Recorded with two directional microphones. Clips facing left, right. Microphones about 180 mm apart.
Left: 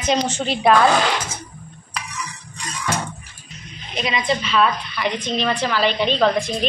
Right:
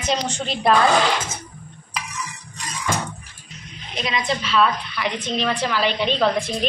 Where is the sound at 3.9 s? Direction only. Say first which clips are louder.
Left 2 dB; 5° left (ahead or behind).